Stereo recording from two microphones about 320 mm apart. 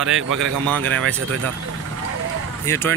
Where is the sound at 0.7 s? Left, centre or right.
Right.